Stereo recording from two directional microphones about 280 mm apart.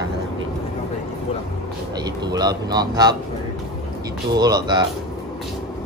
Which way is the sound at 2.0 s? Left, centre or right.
Centre.